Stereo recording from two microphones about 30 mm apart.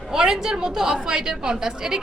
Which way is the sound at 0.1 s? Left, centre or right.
Centre.